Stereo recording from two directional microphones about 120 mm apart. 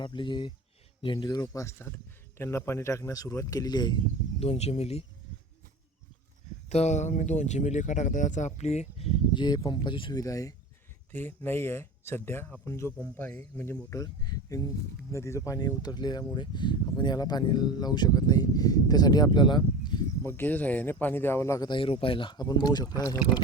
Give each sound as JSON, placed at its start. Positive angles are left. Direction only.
{"t": 0.0, "sound": "speech", "side_deg": 40}
{"t": 4.4, "sound": "speech", "side_deg": 60}
{"t": 6.7, "sound": "speech", "side_deg": 70}
{"t": 9.3, "sound": "speech", "side_deg": 40}
{"t": 10.2, "sound": "speech", "side_deg": 30}
{"t": 11.1, "sound": "speech", "side_deg": 20}
{"t": 13.9, "sound": "speech", "side_deg": 30}
{"t": 20.2, "sound": "speech", "side_deg": 15}
{"t": 21.7, "sound": "speech", "side_deg": 45}